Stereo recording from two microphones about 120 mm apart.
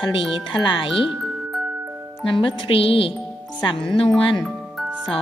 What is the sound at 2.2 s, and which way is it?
Music, 45° left (ahead or behind).